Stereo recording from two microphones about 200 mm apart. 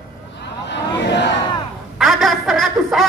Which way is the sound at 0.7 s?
60° left (ahead or behind).